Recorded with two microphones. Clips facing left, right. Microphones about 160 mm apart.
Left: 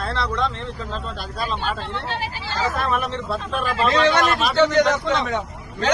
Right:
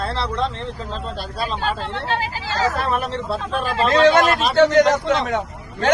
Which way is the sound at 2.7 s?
35° right (ahead or behind).